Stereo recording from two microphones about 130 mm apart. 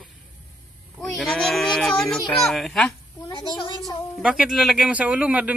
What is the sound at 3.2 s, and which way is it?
Speech, 30° left (ahead or behind).